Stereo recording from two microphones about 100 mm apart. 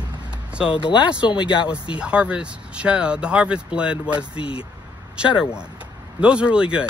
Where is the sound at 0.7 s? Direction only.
55° left (ahead or behind).